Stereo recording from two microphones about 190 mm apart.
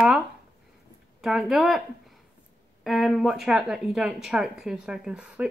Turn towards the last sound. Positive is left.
turn(degrees=-5)  # may be behind; listen again after turning